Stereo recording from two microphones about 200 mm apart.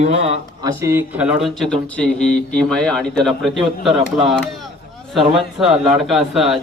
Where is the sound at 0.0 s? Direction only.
30° right (ahead or behind).